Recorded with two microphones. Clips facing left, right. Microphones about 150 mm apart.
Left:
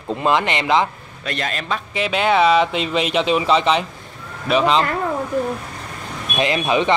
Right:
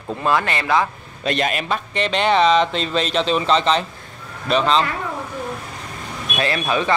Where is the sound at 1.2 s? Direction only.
20° right (ahead or behind).